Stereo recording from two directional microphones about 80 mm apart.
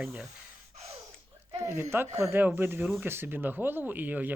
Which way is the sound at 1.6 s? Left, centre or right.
Right.